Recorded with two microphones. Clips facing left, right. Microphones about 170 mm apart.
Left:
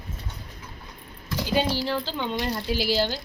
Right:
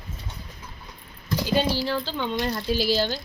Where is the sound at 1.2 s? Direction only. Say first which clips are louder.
Right 1 dB; 15° left (ahead or behind).